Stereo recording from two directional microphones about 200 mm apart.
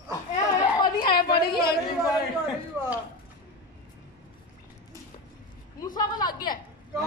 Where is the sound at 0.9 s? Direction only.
50° left (ahead or behind).